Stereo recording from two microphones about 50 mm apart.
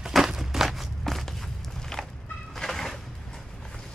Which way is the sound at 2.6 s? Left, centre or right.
Centre.